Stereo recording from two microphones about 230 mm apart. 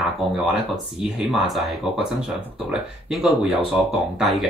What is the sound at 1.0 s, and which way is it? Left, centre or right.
Speech, centre.